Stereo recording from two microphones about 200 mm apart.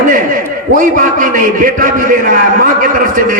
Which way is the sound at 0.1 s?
40° right (ahead or behind).